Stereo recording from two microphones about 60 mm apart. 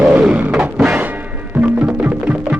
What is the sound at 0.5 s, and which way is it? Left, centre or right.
Music, centre.